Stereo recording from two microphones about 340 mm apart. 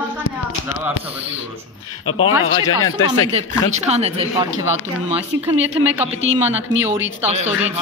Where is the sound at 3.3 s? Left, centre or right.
Centre.